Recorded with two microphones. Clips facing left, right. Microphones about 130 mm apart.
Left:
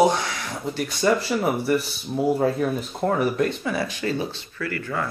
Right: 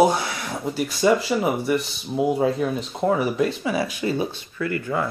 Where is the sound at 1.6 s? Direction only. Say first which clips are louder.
Even; 5° left (ahead or behind).